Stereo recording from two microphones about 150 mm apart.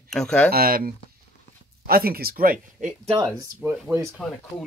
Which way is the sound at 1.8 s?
90° right.